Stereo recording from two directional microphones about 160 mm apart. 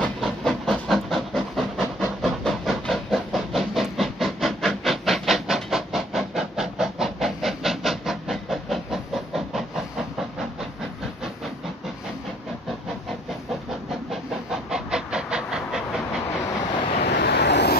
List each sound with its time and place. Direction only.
0.0 s a sound: 5° left (ahead or behind)
14.5 s train: 5° right (ahead or behind)
17.0 s vehicle: 90° left